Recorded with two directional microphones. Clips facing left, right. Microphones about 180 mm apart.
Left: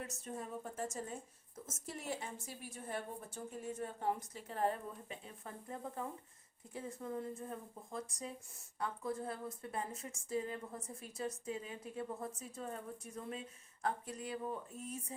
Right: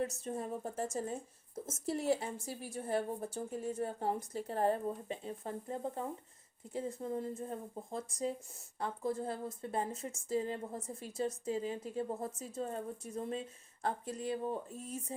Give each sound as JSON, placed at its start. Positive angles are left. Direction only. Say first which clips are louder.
{"t": 0.0, "sound": "speech", "louder": "right 8 dB", "side_deg": -30}
{"t": 1.9, "sound": "speech", "louder": "right 10 dB", "side_deg": -35}